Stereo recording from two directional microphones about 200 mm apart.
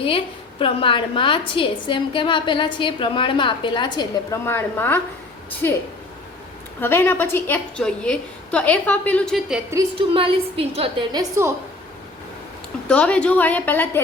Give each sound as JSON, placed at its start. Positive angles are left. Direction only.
{"t": 0.6, "sound": "a woman's voice", "side_deg": 25}
{"t": 9.7, "sound": "a woman's voice", "side_deg": -25}
{"t": 12.9, "sound": "a woman's voice", "side_deg": 5}